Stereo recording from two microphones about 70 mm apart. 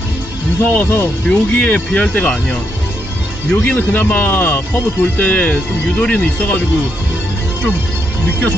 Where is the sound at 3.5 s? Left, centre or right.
Left.